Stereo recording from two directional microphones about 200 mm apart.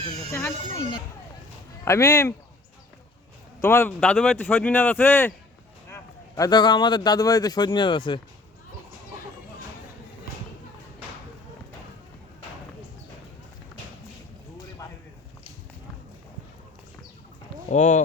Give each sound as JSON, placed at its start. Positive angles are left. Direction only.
{"t": 0.3, "sound": "a man's voice", "side_deg": 15}
{"t": 3.6, "sound": "a man's voice", "side_deg": 15}
{"t": 17.7, "sound": "speech", "side_deg": 35}